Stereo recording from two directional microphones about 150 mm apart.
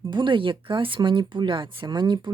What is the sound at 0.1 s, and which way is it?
Speech, 30° right (ahead or behind).